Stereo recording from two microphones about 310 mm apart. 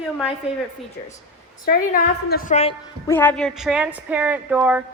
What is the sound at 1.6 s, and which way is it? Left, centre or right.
A woman's voice, left.